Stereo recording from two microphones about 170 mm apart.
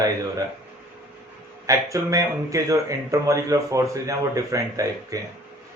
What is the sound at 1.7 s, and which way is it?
Speech, 20° right (ahead or behind).